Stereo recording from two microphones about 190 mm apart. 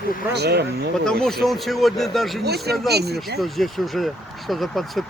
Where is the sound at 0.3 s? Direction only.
60° right (ahead or behind).